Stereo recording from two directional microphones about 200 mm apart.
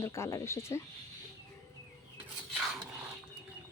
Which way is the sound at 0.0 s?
15° left (ahead or behind).